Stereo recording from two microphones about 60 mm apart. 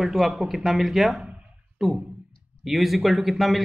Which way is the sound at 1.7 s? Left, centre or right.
Centre.